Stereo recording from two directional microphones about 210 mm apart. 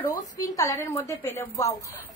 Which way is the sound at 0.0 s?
10° left (ahead or behind).